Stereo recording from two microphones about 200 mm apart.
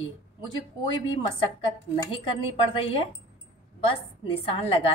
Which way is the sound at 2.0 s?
30° left (ahead or behind).